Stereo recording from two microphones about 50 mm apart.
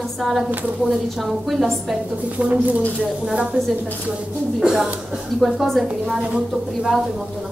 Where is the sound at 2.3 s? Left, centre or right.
Right.